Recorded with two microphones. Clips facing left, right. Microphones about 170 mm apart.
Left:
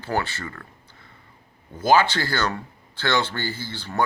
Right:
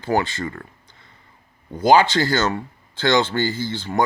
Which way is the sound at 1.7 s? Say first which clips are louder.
Right 4 dB; 15° right (ahead or behind).